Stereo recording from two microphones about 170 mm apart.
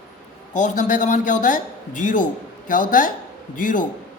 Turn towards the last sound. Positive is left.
turn(degrees=50)  # may be behind; listen again after turning